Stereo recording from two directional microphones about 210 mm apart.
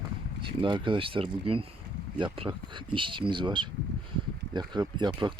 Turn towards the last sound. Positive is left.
turn(degrees=-20)  # may be behind; listen again after turning